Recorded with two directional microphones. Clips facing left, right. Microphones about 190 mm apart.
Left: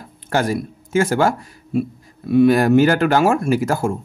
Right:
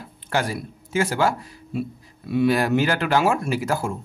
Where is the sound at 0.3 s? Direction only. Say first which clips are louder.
Left 5 dB; 45° left (ahead or behind).